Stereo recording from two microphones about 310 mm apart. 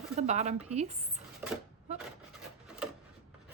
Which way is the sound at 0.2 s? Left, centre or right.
Right.